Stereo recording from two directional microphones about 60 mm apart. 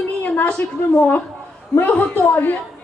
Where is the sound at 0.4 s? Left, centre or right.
Left.